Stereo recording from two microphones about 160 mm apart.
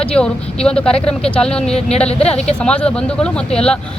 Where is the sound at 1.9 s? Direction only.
40° left (ahead or behind).